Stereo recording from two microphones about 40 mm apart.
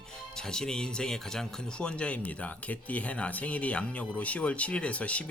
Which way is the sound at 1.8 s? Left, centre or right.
Left.